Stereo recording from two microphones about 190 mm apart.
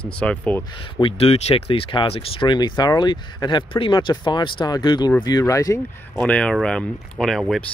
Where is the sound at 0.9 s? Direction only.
30° left (ahead or behind).